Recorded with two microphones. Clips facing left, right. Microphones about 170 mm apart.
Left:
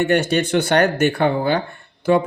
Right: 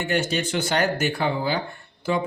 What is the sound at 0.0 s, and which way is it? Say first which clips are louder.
A man's voice: left 7 dB; 60° left (ahead or behind).